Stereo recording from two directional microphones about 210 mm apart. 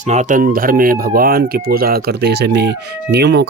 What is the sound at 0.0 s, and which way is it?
Speech, 35° right (ahead or behind).